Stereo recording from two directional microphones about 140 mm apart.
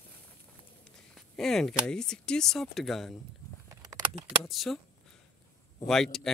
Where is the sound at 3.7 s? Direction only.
25° right (ahead or behind).